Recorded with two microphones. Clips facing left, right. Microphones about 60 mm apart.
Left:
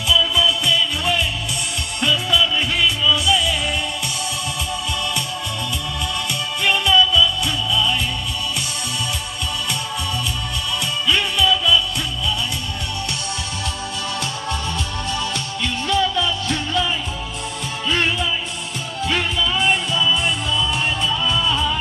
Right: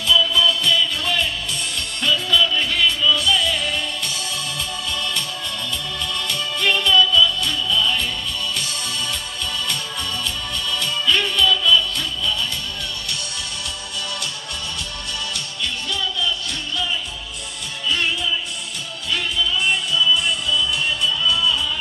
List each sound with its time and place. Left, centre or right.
0.1 s music: centre
6.6 s music: centre
11.1 s music: centre
15.3 s music: left
17.8 s music: left